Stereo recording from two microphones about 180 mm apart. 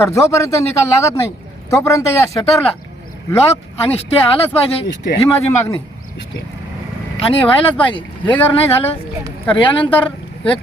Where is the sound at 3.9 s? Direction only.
35° left (ahead or behind).